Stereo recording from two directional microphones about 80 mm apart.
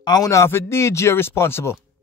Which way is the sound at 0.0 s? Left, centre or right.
Left.